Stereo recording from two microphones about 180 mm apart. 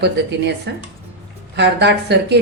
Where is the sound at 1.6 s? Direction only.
70° right (ahead or behind).